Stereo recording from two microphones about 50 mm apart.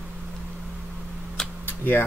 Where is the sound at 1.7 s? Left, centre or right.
Left.